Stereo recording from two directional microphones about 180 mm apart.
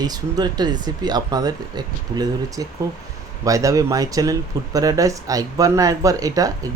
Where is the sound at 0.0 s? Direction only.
20° right (ahead or behind).